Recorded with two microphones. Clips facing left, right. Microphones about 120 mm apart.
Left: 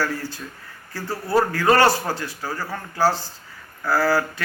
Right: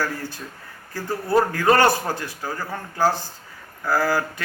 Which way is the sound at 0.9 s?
15° right (ahead or behind).